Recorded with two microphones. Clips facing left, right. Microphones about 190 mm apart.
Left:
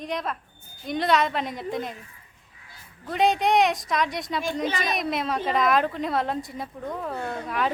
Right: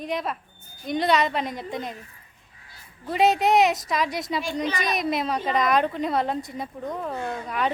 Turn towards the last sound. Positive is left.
turn(degrees=0)  # may be behind; listen again after turning